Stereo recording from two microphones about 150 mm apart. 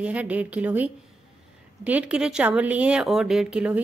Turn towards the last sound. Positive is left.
turn(degrees=-5)  # may be behind; listen again after turning